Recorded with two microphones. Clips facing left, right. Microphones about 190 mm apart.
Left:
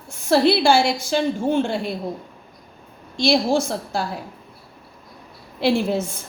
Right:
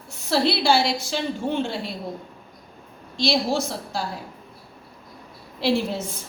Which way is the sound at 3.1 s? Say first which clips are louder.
Left 4 dB; 50° left (ahead or behind).